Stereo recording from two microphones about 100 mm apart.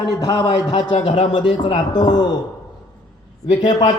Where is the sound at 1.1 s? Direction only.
60° left (ahead or behind).